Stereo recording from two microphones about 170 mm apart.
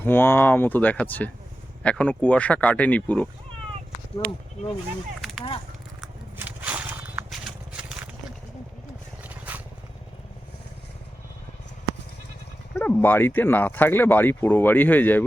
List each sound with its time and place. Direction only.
0.0 s speech: 10° left (ahead or behind)
6.3 s a sound: 10° right (ahead or behind)
9.2 s vehicle: 10° right (ahead or behind)
12.7 s speech: 10° left (ahead or behind)